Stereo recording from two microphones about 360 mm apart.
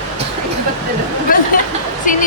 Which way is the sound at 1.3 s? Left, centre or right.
Left.